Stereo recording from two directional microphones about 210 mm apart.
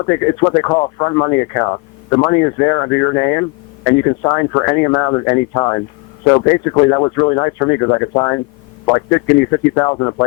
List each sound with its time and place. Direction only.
0.0 s speech: 15° left (ahead or behind)